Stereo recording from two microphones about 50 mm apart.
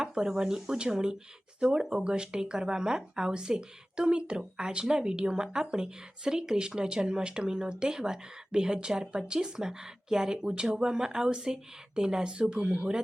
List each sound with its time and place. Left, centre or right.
0.0 s speech: centre